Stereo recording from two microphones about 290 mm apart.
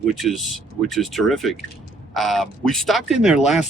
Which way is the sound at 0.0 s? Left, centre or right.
Centre.